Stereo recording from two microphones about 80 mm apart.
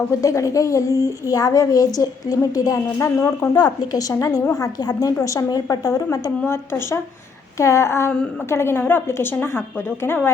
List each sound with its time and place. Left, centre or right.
0.1 s speech: left
3.6 s speech: left
7.6 s a sound: left
8.4 s a woman's voice: left